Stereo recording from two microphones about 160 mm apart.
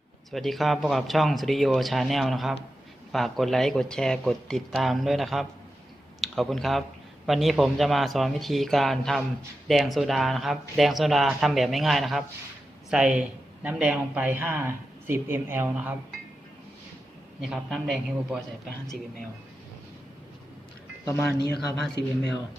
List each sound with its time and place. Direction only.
0.3 s speech: centre (ahead or behind)
17.4 s speech: centre (ahead or behind)
21.3 s speech: 90° left